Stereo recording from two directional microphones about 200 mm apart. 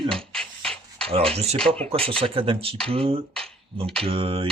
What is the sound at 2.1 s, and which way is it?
Speech, 25° right (ahead or behind).